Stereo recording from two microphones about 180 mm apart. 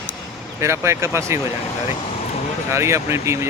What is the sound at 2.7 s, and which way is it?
Speech, 15° right (ahead or behind).